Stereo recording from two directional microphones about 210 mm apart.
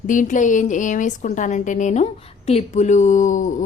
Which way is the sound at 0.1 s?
40° left (ahead or behind).